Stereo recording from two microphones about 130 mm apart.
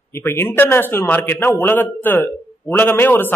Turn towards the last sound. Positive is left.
turn(degrees=15)  # may be behind; listen again after turning